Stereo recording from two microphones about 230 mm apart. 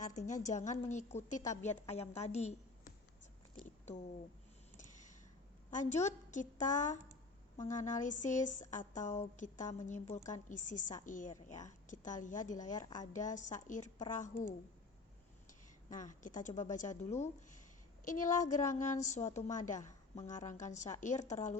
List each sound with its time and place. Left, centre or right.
0.2 s a woman's voice: left
1.4 s a woman's voice: centre
1.7 s a woman's voice: left
5.7 s a woman's voice: left
15.9 s a woman's voice: left